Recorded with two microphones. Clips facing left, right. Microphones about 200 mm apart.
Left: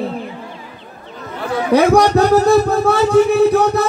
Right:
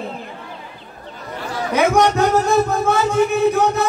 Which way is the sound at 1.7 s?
35° left (ahead or behind).